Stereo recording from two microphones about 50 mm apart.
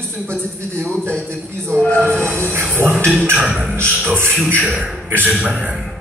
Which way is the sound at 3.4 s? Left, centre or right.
Right.